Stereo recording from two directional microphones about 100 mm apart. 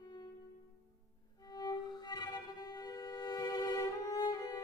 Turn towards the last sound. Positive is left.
turn(degrees=40)  # may be behind; listen again after turning